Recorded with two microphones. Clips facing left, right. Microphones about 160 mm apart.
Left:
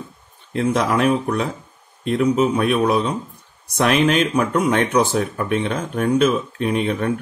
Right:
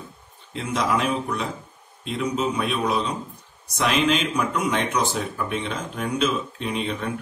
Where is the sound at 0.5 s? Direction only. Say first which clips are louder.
Left 5 dB; 60° left (ahead or behind).